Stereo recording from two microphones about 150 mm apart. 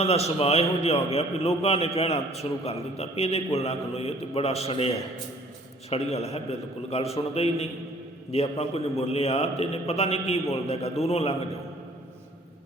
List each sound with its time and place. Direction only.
0.0 s a man's voice: 45° left (ahead or behind)
5.9 s a man's voice: 45° left (ahead or behind)